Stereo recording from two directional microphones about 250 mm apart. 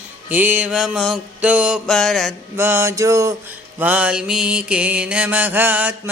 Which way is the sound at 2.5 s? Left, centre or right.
Centre.